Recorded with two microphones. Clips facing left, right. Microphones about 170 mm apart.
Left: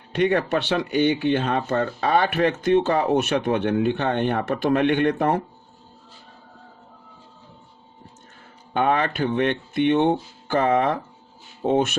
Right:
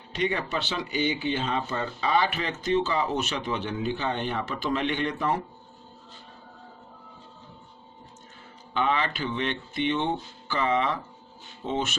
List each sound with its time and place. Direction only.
0.1 s speech: 60° left (ahead or behind)
8.7 s speech: 50° left (ahead or behind)